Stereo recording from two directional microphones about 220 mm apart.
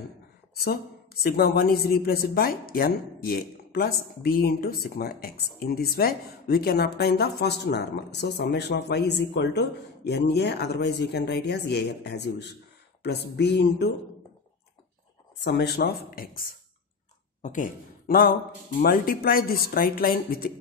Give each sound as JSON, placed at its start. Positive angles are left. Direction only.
{"t": 1.2, "sound": "a woman's voice", "side_deg": 45}
{"t": 15.4, "sound": "a woman's voice", "side_deg": 50}